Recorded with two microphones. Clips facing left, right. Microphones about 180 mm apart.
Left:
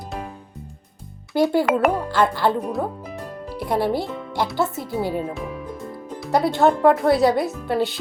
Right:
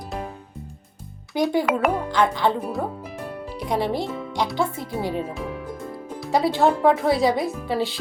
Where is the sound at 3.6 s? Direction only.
5° left (ahead or behind).